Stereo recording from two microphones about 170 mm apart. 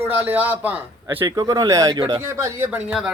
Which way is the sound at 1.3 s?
20° right (ahead or behind).